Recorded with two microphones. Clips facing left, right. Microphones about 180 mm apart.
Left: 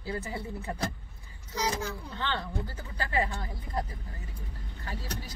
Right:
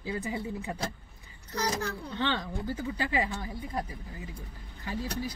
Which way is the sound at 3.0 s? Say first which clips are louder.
Left 1 dB; 15° right (ahead or behind).